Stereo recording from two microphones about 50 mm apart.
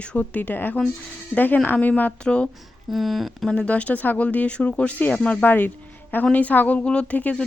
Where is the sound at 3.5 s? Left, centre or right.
Left.